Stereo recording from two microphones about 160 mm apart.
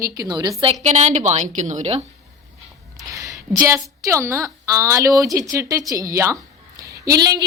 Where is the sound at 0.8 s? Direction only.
45° right (ahead or behind).